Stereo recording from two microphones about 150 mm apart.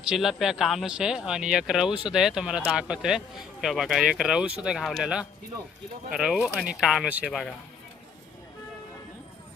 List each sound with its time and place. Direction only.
0.1 s a man's voice: centre (ahead or behind)